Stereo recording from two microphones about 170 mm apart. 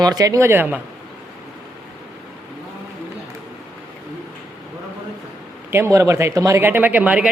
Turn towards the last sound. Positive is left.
turn(degrees=-10)  # may be behind; listen again after turning